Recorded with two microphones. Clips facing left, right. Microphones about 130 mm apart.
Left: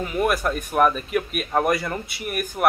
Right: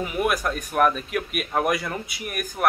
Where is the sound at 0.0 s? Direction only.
5° right (ahead or behind).